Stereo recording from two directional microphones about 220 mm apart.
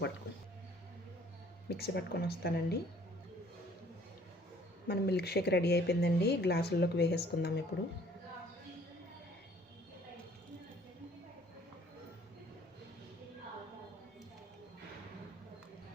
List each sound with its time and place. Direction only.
1.7 s speech: 45° left (ahead or behind)
4.9 s speech: 45° left (ahead or behind)